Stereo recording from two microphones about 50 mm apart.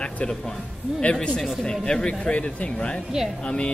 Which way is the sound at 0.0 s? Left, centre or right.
Centre.